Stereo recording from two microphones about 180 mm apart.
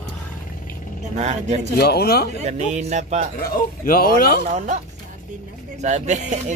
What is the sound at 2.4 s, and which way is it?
Speech, 40° right (ahead or behind).